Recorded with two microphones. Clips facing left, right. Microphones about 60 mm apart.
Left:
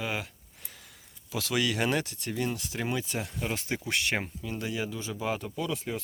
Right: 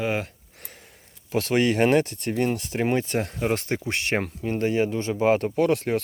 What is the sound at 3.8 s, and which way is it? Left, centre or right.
Speech, right.